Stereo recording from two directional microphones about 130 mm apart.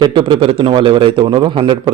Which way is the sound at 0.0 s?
35° right (ahead or behind).